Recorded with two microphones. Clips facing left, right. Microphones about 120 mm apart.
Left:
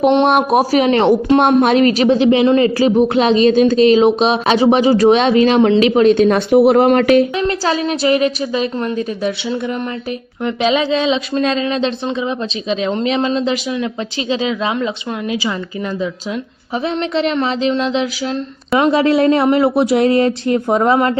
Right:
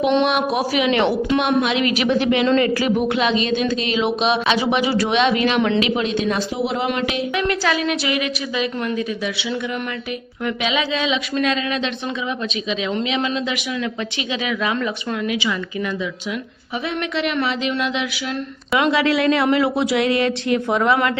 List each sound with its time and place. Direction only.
0.3 s a woman's voice: 45° left (ahead or behind)
2.1 s a woman's voice: 25° left (ahead or behind); by 6.4 s 45° left (ahead or behind)
6.5 s speech: 60° left (ahead or behind)
7.3 s a woman's voice: 30° left (ahead or behind)
16.8 s a woman's voice: 35° left (ahead or behind)